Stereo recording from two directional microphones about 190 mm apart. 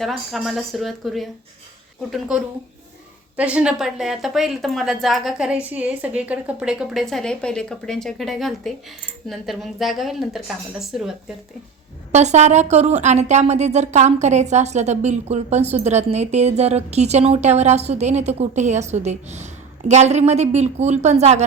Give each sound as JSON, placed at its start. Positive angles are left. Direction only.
{"t": 0.0, "sound": "speech", "side_deg": 0}
{"t": 12.1, "sound": "speech", "side_deg": -35}